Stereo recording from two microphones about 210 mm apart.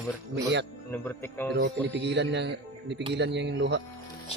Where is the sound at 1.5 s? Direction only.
55° right (ahead or behind).